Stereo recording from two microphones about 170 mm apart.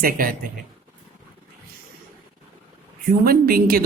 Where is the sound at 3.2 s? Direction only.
60° right (ahead or behind).